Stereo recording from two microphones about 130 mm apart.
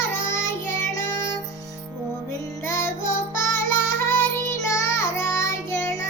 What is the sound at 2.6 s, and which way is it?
Music, 20° left (ahead or behind).